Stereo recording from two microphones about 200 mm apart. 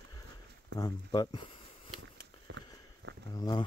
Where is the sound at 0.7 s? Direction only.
20° left (ahead or behind).